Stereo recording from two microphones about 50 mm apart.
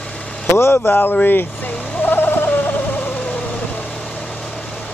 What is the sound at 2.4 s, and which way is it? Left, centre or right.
Owl, left.